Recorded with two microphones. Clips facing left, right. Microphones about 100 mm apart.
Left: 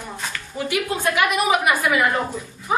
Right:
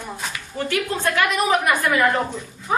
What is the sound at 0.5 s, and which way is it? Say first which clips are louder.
A woman's voice: even; 10° left (ahead or behind).